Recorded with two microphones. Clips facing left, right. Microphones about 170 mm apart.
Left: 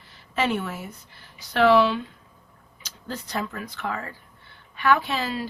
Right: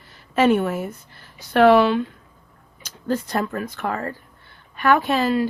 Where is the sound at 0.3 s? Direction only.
50° right (ahead or behind).